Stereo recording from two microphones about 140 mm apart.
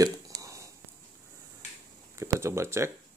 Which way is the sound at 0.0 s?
25° right (ahead or behind).